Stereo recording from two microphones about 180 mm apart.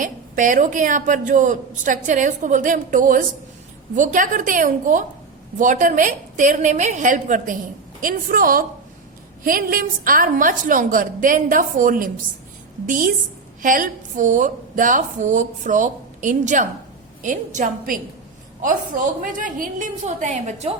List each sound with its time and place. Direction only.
0.0 s a woman's voice: 45° right (ahead or behind)